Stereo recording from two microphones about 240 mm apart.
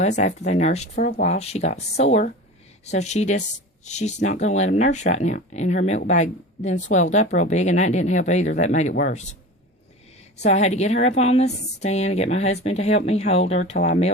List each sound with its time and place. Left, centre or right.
0.0 s a woman's voice: left
10.4 s a woman's voice: left